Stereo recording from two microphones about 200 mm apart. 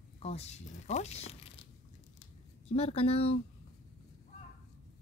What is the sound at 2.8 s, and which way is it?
Speech, 30° left (ahead or behind).